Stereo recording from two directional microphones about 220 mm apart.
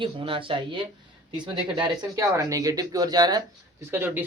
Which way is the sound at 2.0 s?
15° right (ahead or behind).